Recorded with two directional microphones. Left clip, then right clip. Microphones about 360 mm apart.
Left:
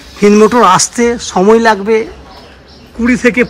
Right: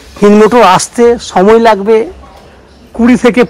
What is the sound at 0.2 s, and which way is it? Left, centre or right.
Speech, centre.